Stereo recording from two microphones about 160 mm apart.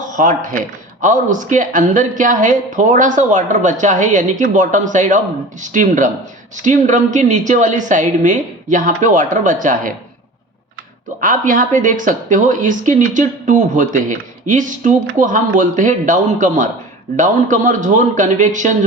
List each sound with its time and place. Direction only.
0.0 s speech: 55° right (ahead or behind)
11.2 s speech: 55° right (ahead or behind)